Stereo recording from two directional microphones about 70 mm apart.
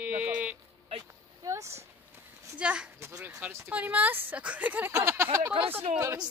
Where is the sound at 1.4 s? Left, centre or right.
Right.